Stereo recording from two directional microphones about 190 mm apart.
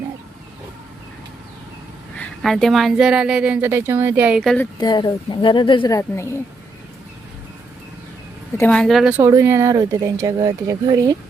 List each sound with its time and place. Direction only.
2.1 s a woman's voice: 5° left (ahead or behind)
4.8 s a woman's voice: 20° left (ahead or behind)
8.5 s a woman's voice: 5° left (ahead or behind); by 11.2 s 20° right (ahead or behind)